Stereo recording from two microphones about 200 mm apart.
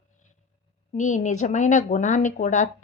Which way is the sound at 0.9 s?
40° left (ahead or behind).